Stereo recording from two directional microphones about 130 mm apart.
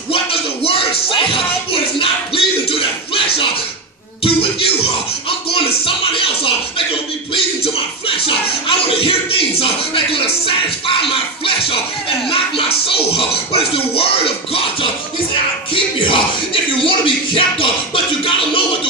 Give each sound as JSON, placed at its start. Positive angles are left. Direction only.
{"t": 0.1, "sound": "music", "side_deg": 45}
{"t": 4.2, "sound": "a sound", "side_deg": 45}
{"t": 5.5, "sound": "music", "side_deg": 45}
{"t": 8.3, "sound": "music", "side_deg": 45}
{"t": 15.7, "sound": "bellow", "side_deg": 40}
{"t": 16.8, "sound": "music", "side_deg": 40}